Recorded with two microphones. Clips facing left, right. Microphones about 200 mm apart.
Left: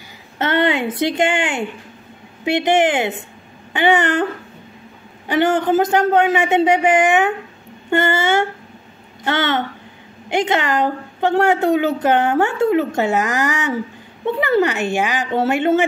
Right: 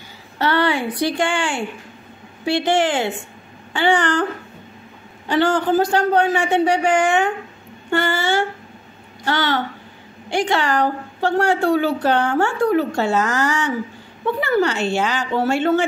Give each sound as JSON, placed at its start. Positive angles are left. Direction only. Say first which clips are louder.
{"t": 0.4, "sound": "a woman's voice", "louder": "left 1 dB", "side_deg": 20}
{"t": 5.3, "sound": "a woman's voice", "louder": "left 1 dB", "side_deg": 20}